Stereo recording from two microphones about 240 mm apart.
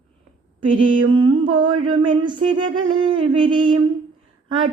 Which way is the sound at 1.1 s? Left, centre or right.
Right.